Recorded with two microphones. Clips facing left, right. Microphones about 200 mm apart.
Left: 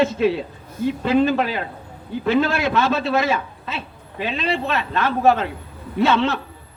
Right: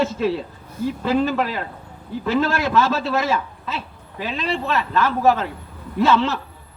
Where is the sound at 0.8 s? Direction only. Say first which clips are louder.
Left 2 dB; 25° left (ahead or behind).